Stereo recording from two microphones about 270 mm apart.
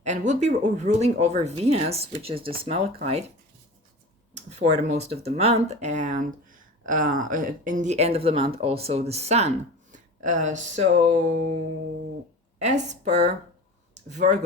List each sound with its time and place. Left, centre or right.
0.0 s speech: right
4.6 s speech: right
12.5 s speech: right